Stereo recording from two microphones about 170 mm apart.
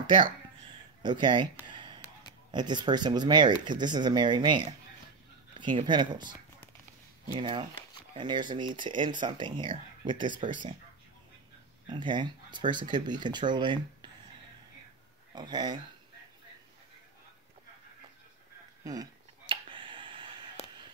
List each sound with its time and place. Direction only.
0.0 s speech: 30° right (ahead or behind)
2.5 s speech: 25° right (ahead or behind)
7.3 s speech: 30° right (ahead or behind)
11.9 s speech: 25° right (ahead or behind)
15.3 s speech: 25° right (ahead or behind)
18.9 s a sound: 25° right (ahead or behind)
20.6 s a sound: 40° left (ahead or behind)